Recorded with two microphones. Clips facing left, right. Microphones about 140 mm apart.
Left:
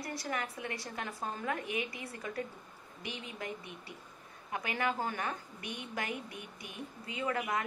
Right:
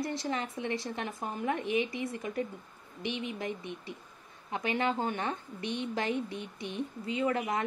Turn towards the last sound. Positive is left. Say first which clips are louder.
# right 4 dB
turn(degrees=-25)  # may be behind; listen again after turning